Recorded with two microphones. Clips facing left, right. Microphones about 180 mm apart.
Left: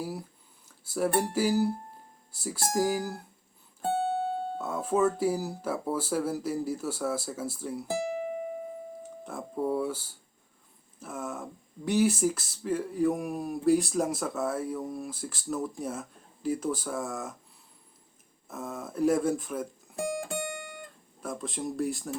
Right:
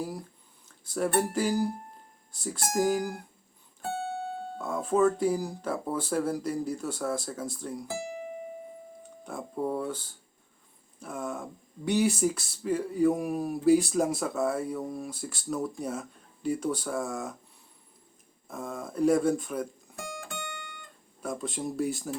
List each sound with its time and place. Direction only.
0.0 s a sound: 10° left (ahead or behind)
0.9 s speech: 5° left (ahead or behind)
3.8 s music: 25° left (ahead or behind)
4.5 s speech: 5° left (ahead or behind)
9.2 s speech: centre (ahead or behind)
18.4 s speech: 5° left (ahead or behind)
19.9 s music: centre (ahead or behind)
21.2 s speech: centre (ahead or behind)